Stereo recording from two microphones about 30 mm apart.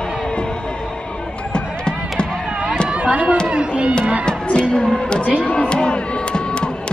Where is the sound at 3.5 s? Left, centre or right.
Right.